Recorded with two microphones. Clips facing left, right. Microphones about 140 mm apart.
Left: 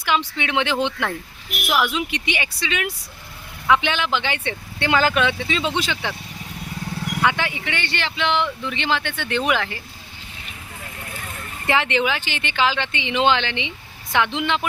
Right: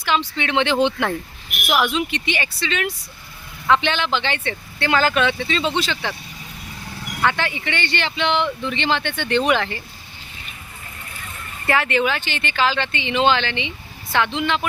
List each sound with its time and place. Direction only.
0.0 s speech: 10° left (ahead or behind)
7.2 s speech: 10° left (ahead or behind)
11.6 s speech: 20° left (ahead or behind)